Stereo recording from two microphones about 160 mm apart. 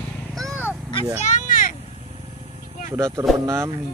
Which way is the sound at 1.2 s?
55° left (ahead or behind).